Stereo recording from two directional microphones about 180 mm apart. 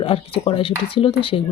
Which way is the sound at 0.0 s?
30° left (ahead or behind).